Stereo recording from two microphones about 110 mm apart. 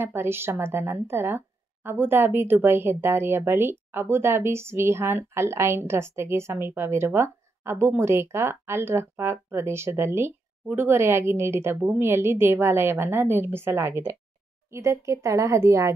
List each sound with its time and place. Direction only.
0.0 s a woman's voice: 20° right (ahead or behind)